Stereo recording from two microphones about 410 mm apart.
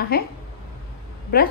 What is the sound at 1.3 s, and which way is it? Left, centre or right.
Speech, left.